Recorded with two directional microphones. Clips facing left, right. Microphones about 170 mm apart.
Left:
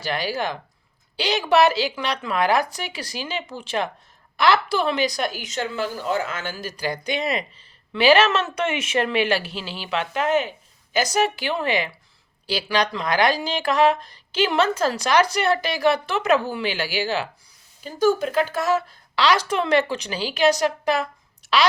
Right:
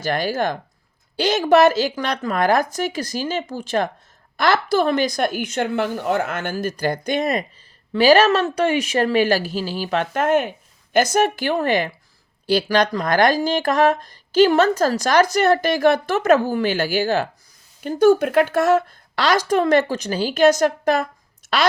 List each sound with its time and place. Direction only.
0.0 s speech: 45° right (ahead or behind)
17.7 s speech: 60° right (ahead or behind)